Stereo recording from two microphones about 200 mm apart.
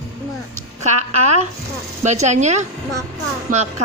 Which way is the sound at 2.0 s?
35° right (ahead or behind).